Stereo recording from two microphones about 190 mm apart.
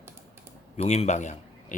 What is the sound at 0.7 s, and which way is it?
Speech, 35° left (ahead or behind).